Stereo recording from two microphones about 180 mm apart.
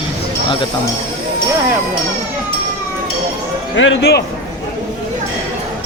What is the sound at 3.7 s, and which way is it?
Speech, 90° left.